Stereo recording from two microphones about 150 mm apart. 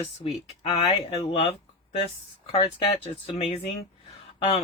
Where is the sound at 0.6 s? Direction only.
35° left (ahead or behind).